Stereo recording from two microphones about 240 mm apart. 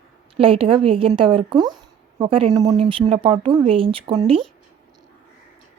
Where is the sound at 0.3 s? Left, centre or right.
Right.